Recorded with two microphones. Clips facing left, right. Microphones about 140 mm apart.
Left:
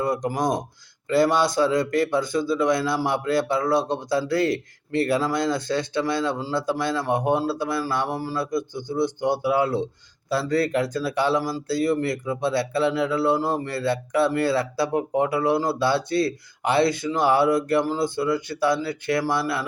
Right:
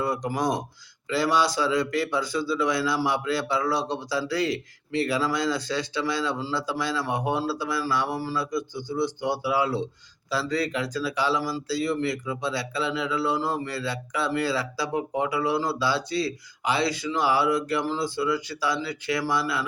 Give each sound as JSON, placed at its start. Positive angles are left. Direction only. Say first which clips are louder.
{"t": 0.0, "sound": "speech", "louder": "left 2 dB", "side_deg": 45}